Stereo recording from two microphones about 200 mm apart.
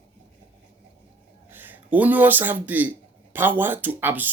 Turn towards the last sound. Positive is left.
turn(degrees=-10)  # may be behind; listen again after turning